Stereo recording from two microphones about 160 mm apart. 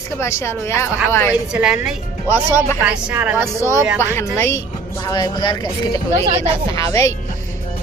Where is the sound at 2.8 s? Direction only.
10° right (ahead or behind).